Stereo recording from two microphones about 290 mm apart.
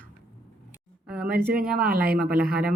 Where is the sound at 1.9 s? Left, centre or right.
Right.